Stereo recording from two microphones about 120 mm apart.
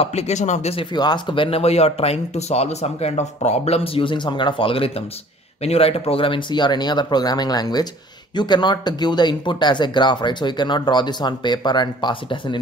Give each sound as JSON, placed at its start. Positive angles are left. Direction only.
{"t": 0.0, "sound": "speech", "side_deg": 60}
{"t": 0.7, "sound": "speech", "side_deg": 35}